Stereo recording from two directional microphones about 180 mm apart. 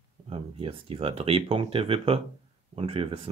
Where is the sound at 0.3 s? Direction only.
30° right (ahead or behind).